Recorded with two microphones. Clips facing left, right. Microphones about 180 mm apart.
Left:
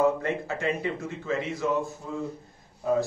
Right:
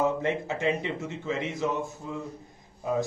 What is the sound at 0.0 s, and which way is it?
Speech, 20° right (ahead or behind).